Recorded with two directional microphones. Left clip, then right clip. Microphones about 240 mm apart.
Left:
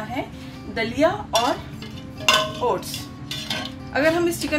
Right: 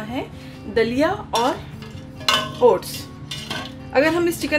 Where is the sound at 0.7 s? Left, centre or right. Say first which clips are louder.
Right 2 dB; right.